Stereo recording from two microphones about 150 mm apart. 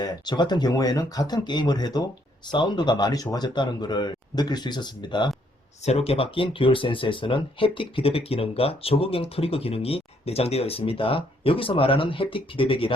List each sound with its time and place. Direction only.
0.0 s speech: 30° left (ahead or behind)
5.8 s speech: 45° left (ahead or behind)